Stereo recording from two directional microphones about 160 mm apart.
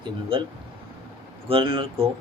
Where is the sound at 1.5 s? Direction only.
30° right (ahead or behind).